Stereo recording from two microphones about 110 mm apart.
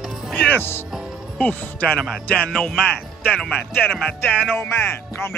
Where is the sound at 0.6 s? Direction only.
20° left (ahead or behind).